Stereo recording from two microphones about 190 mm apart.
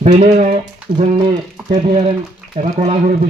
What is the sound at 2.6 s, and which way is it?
Speech, 35° right (ahead or behind).